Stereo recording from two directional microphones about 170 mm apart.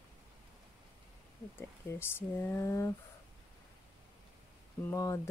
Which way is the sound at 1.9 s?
15° left (ahead or behind).